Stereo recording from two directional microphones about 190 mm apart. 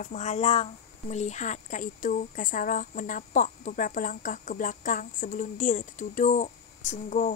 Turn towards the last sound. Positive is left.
turn(degrees=40)  # may be behind; listen again after turning